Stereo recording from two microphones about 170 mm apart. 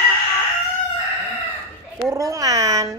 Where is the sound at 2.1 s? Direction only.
20° right (ahead or behind).